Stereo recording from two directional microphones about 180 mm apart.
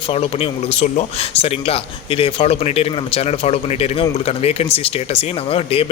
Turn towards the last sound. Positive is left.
turn(degrees=30)  # may be behind; listen again after turning